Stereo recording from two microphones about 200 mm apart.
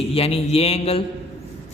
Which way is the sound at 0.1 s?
30° left (ahead or behind).